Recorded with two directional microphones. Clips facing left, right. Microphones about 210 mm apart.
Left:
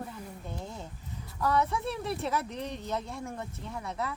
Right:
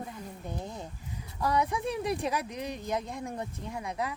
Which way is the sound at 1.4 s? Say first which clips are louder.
Even; 15° right (ahead or behind).